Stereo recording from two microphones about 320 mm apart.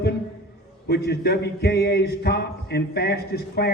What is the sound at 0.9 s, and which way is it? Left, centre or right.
A man's voice, left.